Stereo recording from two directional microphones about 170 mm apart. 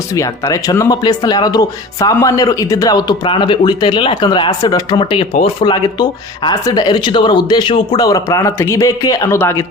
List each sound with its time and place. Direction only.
0.1 s speech: 20° left (ahead or behind)